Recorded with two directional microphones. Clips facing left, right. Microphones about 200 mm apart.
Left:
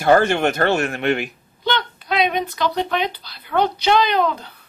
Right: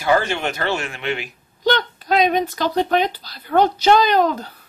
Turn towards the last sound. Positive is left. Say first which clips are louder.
# right 2 dB
turn(degrees=-40)  # may be behind; listen again after turning